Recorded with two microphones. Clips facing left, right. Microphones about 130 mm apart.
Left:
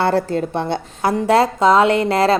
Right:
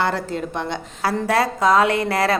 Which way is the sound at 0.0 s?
30° left (ahead or behind).